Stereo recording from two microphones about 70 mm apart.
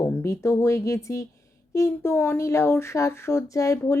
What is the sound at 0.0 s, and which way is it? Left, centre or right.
Speech, left.